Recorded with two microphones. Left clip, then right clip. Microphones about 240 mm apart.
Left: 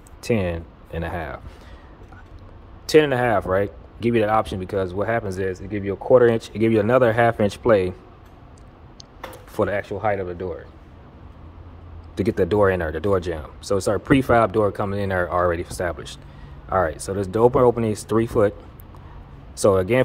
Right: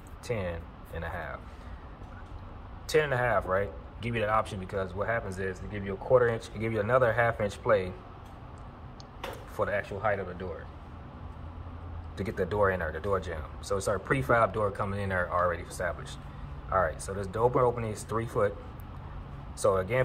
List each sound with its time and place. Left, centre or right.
0.2 s speech: left
2.9 s speech: left
9.5 s speech: left
12.2 s speech: left
19.5 s speech: left